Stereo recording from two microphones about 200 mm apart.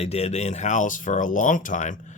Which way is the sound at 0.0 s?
30° left (ahead or behind).